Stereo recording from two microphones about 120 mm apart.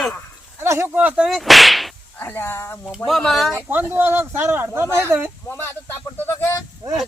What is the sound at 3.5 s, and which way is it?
Speech, 15° right (ahead or behind).